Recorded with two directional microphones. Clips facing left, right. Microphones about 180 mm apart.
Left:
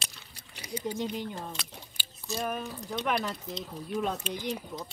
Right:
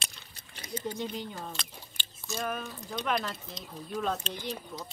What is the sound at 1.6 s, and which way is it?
Speech, 10° left (ahead or behind).